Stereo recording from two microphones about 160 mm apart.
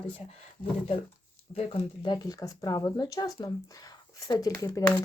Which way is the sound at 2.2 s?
25° left (ahead or behind).